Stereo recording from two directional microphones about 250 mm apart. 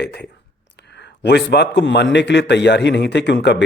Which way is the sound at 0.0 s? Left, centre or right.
Left.